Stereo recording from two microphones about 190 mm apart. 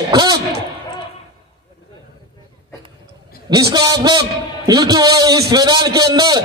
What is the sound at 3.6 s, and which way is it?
A man's voice, 20° right (ahead or behind).